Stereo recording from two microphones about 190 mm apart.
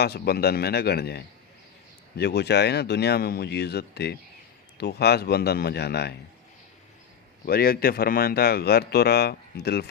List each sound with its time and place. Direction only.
0.0 s speech: 55° left (ahead or behind)
7.4 s speech: 50° left (ahead or behind)